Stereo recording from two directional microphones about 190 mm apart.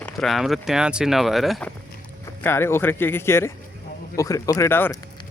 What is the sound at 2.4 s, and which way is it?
Speech, 10° left (ahead or behind).